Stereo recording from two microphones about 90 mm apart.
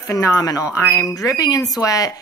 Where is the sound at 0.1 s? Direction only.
35° left (ahead or behind).